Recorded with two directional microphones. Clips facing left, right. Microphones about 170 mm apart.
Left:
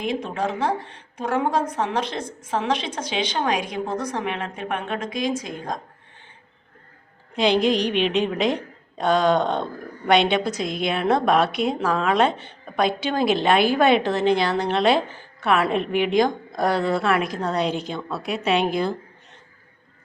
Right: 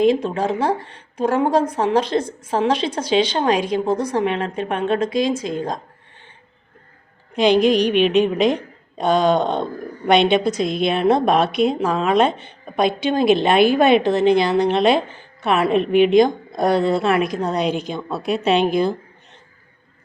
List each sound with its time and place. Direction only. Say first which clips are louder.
0.0 s a woman's voice: right 8 dB; 30° right (ahead or behind)
7.3 s a woman's voice: right 5 dB; 15° right (ahead or behind)
18.2 s a woman's voice: right 5 dB; 30° right (ahead or behind)